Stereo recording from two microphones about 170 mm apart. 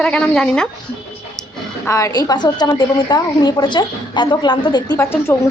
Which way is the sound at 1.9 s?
20° left (ahead or behind).